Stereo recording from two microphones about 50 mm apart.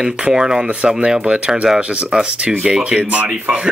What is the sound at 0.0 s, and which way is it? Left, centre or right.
Speech, centre.